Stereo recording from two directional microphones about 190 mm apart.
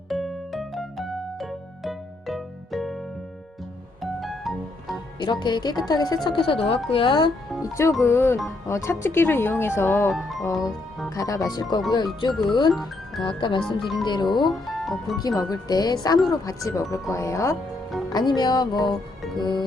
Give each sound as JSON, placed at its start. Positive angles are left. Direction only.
{"t": 0.1, "sound": "music", "side_deg": 0}
{"t": 4.0, "sound": "music", "side_deg": 0}
{"t": 5.2, "sound": "a woman's voice", "side_deg": 25}
{"t": 6.6, "sound": "speech", "side_deg": 5}
{"t": 6.9, "sound": "a woman's voice", "side_deg": 25}
{"t": 10.1, "sound": "speech", "side_deg": 0}
{"t": 10.4, "sound": "a woman's voice", "side_deg": 20}
{"t": 12.7, "sound": "speech", "side_deg": 0}
{"t": 13.2, "sound": "a woman's voice", "side_deg": 25}
{"t": 13.7, "sound": "speech", "side_deg": 0}
{"t": 14.0, "sound": "a woman's voice", "side_deg": 25}
{"t": 14.7, "sound": "speech", "side_deg": 0}
{"t": 15.4, "sound": "a woman's voice", "side_deg": 20}